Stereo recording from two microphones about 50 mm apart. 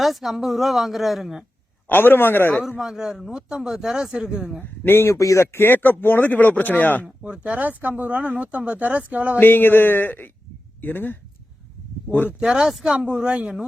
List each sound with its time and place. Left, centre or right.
0.0 s a woman's voice: centre
1.9 s speech: left
2.6 s speech: centre
4.6 s speech: left
5.1 s speech: left
7.3 s a woman's voice: right
7.6 s speech: right
9.4 s speech: left
12.4 s speech: centre
12.6 s speech: centre
13.0 s a woman's voice: right